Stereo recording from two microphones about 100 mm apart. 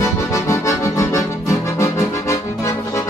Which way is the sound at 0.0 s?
30° left (ahead or behind).